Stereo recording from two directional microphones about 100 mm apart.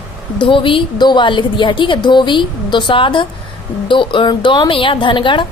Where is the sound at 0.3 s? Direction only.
55° left (ahead or behind).